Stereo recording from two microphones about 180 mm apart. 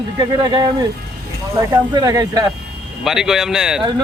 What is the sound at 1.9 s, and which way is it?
Speech, 20° right (ahead or behind).